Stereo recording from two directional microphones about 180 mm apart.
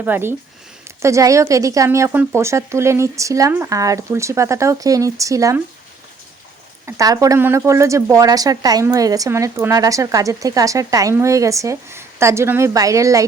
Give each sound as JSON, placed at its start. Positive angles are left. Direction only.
{"t": 0.0, "sound": "speech", "side_deg": -10}
{"t": 6.8, "sound": "speech", "side_deg": -20}